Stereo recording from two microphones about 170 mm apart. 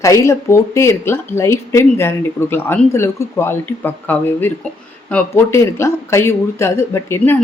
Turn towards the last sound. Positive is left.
turn(degrees=15)  # may be behind; listen again after turning